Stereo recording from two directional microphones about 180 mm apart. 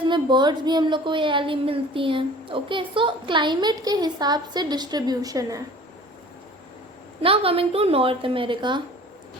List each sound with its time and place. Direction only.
0.0 s a woman's voice: 25° right (ahead or behind)
7.2 s a woman's voice: 30° right (ahead or behind)